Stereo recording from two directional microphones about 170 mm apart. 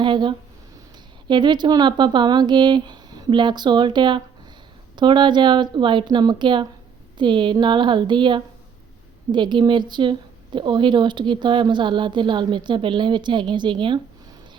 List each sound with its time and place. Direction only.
0.0 s speech: 30° right (ahead or behind)